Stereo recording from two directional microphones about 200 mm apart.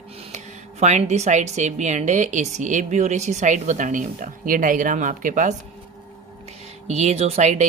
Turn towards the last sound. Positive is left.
turn(degrees=-35)  # may be behind; listen again after turning